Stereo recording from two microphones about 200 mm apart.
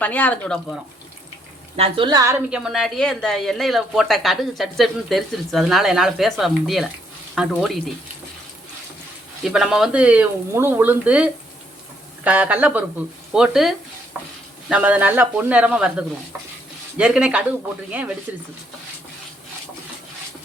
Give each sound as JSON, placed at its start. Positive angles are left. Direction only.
{"t": 0.0, "sound": "speech", "side_deg": 10}
{"t": 1.7, "sound": "a woman's voice", "side_deg": -25}
{"t": 2.5, "sound": "speech", "side_deg": -5}
{"t": 9.4, "sound": "speech", "side_deg": 0}